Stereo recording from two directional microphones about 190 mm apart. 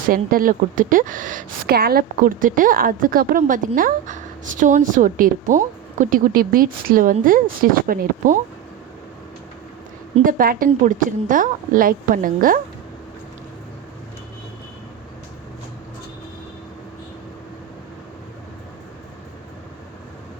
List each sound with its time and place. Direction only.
0.1 s a woman's voice: 50° right (ahead or behind)
10.2 s a woman's voice: 45° right (ahead or behind)